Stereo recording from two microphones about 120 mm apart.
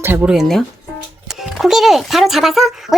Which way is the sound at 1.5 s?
Centre (ahead or behind).